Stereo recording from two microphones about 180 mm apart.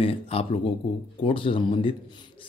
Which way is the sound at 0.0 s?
30° left (ahead or behind).